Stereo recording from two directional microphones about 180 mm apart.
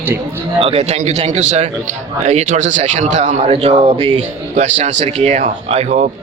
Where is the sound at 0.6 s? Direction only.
35° right (ahead or behind).